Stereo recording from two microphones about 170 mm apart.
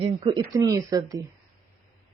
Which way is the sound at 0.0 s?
30° right (ahead or behind).